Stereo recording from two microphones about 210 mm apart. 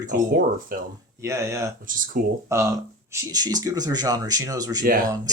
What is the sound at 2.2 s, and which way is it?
Speech, 40° right (ahead or behind).